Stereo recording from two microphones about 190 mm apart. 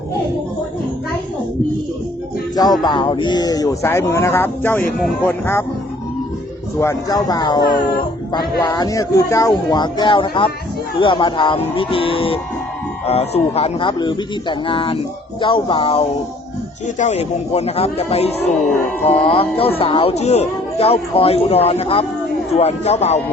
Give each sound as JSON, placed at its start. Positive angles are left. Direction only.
{"t": 2.8, "sound": "speech", "side_deg": 25}
{"t": 6.7, "sound": "speech", "side_deg": 15}